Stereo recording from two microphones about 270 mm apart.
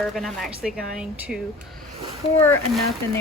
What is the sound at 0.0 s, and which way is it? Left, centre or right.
Speech, centre.